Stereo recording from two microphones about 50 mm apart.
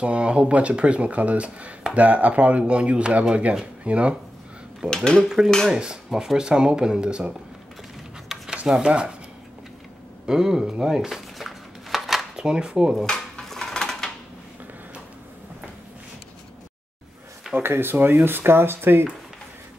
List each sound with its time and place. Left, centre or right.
0.0 s speech: right
4.8 s speech: centre
5.7 s speech: centre
8.3 s a sound: centre
8.8 s speech: right
10.2 s chopping: centre
12.4 s speech: centre
13.0 s dishes: centre
17.6 s speech: right